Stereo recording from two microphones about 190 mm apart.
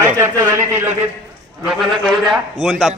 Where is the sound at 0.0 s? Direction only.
10° right (ahead or behind).